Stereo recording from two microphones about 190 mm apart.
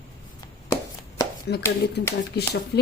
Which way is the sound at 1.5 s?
60° left (ahead or behind).